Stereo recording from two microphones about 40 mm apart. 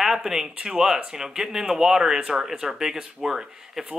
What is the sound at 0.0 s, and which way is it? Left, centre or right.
Speech, centre.